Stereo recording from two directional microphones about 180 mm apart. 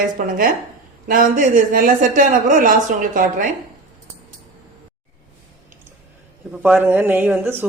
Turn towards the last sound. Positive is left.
turn(degrees=-10)  # may be behind; listen again after turning